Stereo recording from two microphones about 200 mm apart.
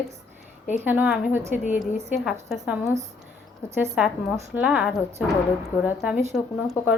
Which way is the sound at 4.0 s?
5° right (ahead or behind).